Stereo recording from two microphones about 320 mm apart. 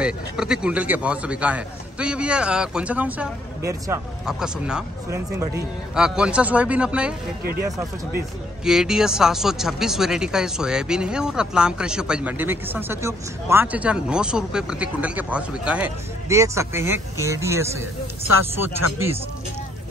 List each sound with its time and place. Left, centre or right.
0.0 s speech: centre
8.6 s speech: centre